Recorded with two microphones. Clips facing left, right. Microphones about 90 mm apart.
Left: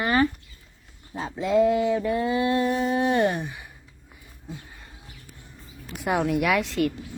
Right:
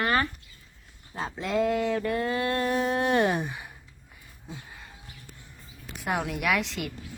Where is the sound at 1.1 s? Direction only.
Centre (ahead or behind).